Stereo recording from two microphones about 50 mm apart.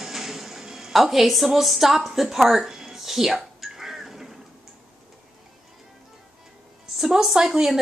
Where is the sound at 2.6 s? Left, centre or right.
Centre.